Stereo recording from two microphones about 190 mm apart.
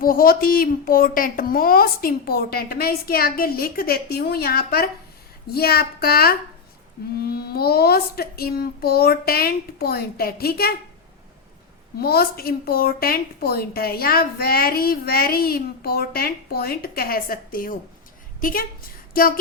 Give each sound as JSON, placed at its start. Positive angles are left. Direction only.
{"t": 0.0, "sound": "a woman's voice", "side_deg": 50}
{"t": 11.9, "sound": "a woman's voice", "side_deg": 55}